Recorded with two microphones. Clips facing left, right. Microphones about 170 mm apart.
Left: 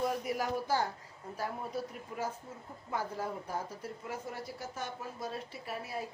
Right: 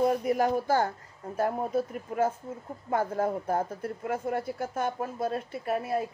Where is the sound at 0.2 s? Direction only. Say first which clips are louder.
Right 8 dB; 50° right (ahead or behind).